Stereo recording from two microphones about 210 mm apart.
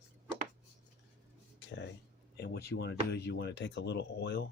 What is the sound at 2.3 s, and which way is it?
Speech, 50° left (ahead or behind).